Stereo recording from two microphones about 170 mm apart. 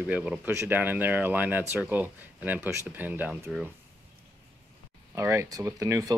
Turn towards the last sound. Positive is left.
turn(degrees=-20)  # may be behind; listen again after turning